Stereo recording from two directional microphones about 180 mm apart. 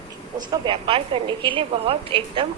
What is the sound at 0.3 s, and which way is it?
A woman's voice, 25° right (ahead or behind).